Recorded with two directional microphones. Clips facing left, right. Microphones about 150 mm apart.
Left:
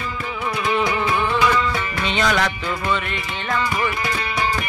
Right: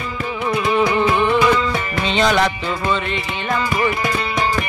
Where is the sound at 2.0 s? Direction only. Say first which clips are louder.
Right 4 dB; 25° right (ahead or behind).